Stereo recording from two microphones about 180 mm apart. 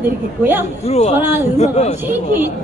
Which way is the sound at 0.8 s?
35° left (ahead or behind).